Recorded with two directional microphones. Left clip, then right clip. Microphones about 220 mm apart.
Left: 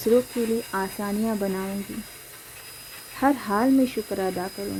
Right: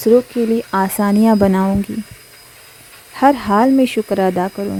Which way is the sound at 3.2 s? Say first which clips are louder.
Right 10 dB; 40° right (ahead or behind).